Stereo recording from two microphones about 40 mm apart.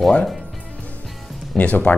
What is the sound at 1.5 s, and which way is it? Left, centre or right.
Speech, left.